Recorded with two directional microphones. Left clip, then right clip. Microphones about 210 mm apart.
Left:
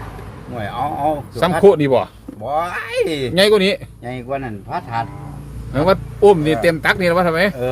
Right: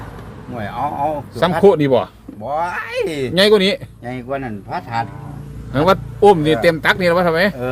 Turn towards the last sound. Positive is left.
turn(degrees=-5)  # may be behind; listen again after turning